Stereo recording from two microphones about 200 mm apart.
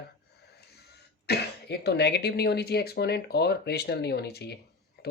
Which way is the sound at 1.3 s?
55° left (ahead or behind).